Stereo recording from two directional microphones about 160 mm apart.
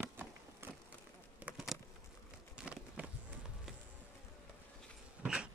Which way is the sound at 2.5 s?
5° right (ahead or behind).